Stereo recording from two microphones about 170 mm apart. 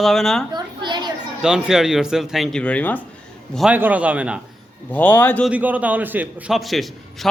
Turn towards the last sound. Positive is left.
turn(degrees=0)  # may be behind; listen again after turning